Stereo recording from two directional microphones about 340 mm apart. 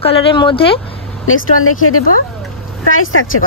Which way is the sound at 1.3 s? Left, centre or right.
Left.